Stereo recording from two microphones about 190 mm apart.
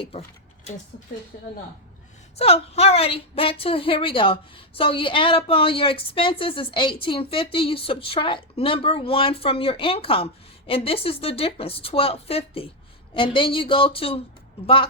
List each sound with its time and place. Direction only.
2.4 s a woman's voice: 35° left (ahead or behind)